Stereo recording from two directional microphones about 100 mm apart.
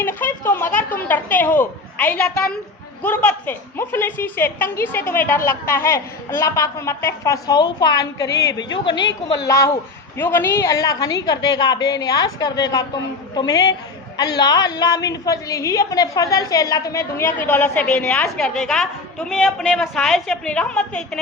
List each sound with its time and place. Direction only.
0.0 s a woman's voice: 20° left (ahead or behind); by 9.5 s 50° left (ahead or behind)
9.5 s a woman's voice: 30° left (ahead or behind); by 19.5 s centre (ahead or behind)
19.5 s a woman's voice: 10° left (ahead or behind)